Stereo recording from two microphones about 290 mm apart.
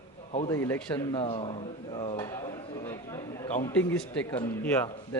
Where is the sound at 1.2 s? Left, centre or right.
Centre.